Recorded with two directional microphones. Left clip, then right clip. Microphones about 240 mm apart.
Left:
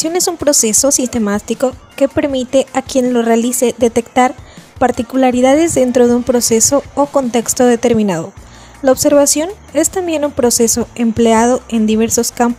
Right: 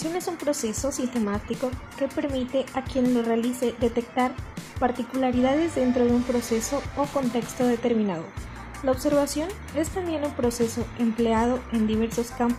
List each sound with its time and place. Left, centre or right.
0.6 s a woman's voice: left